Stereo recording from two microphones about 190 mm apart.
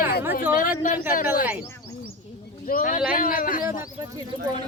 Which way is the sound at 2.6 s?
45° left (ahead or behind).